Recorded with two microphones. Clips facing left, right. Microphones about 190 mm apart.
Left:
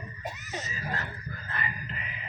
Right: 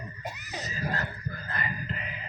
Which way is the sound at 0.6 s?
40° right (ahead or behind).